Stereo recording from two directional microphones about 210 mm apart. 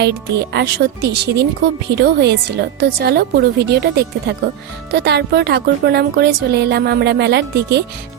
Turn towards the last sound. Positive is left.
turn(degrees=-55)  # may be behind; listen again after turning